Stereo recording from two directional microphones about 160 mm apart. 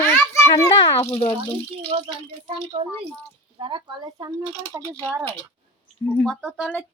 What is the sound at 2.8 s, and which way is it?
Speech, 35° right (ahead or behind).